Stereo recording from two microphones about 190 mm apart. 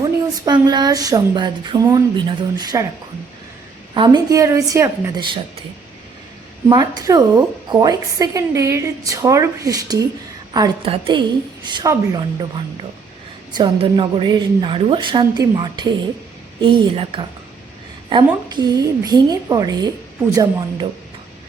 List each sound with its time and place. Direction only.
0.0 s speech: 20° right (ahead or behind)
3.9 s a woman's voice: 25° right (ahead or behind)
6.7 s a woman's voice: 20° right (ahead or behind)
13.6 s a woman's voice: 25° right (ahead or behind)